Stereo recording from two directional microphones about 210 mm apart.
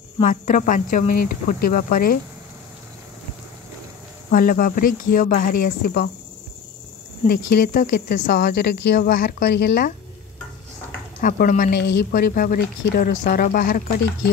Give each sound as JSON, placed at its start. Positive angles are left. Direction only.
{"t": 0.2, "sound": "speech", "side_deg": 40}
{"t": 4.3, "sound": "speech", "side_deg": 40}
{"t": 7.2, "sound": "speech", "side_deg": 45}
{"t": 11.1, "sound": "speech", "side_deg": 40}